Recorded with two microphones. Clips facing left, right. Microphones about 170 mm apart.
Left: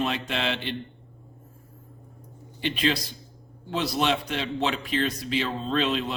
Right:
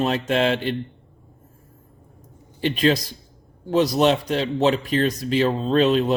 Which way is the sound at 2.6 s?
45° right (ahead or behind).